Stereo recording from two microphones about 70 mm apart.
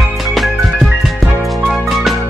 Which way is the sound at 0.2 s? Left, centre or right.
Centre.